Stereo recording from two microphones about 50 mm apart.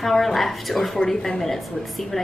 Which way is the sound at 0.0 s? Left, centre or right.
Centre.